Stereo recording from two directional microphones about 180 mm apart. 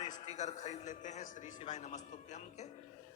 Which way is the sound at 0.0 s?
40° left (ahead or behind).